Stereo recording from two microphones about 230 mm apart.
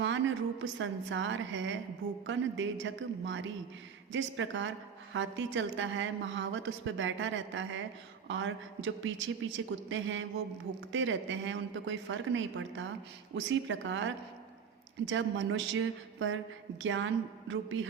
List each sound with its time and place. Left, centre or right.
0.6 s a woman's voice: right